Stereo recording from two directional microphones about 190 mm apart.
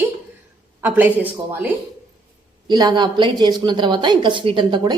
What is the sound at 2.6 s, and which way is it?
A woman's voice, 20° right (ahead or behind).